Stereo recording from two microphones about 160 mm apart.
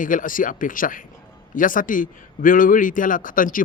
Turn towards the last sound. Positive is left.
turn(degrees=60)  # may be behind; listen again after turning